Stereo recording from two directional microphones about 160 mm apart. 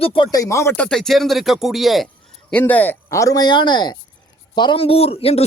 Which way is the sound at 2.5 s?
10° left (ahead or behind).